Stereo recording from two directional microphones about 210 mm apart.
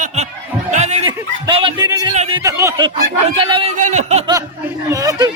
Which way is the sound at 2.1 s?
30° right (ahead or behind).